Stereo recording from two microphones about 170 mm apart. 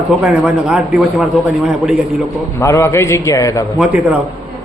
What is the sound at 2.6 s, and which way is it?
A man's voice, 15° left (ahead or behind).